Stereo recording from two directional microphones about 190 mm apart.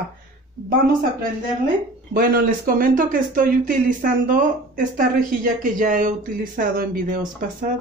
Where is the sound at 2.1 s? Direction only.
50° right (ahead or behind).